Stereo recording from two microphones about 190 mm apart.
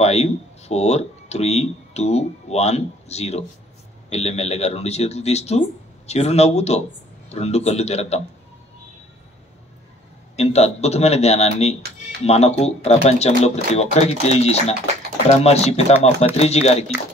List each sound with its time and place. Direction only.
0.0 s speech: 35° left (ahead or behind)
10.3 s speech: 35° left (ahead or behind)